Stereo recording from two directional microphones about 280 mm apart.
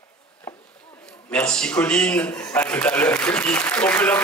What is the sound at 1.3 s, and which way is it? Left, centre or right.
A man's voice, centre.